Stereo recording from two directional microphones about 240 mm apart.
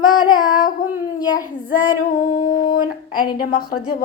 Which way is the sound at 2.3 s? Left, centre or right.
Left.